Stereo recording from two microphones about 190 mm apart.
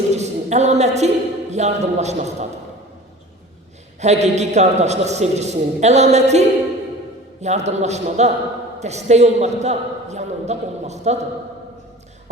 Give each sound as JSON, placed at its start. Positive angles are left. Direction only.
{"t": 0.1, "sound": "a woman's voice", "side_deg": -35}
{"t": 4.0, "sound": "a man's voice", "side_deg": -35}
{"t": 7.4, "sound": "a man's voice", "side_deg": -35}